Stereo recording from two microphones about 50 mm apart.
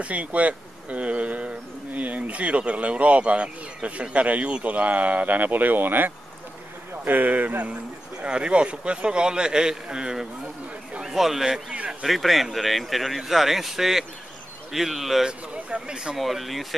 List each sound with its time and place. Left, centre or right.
0.0 s speech: right
8.2 s speech: right; by 11.6 s centre
11.7 s a sound: right
12.0 s speech: centre
15.2 s a sound: right
16.2 s speech: centre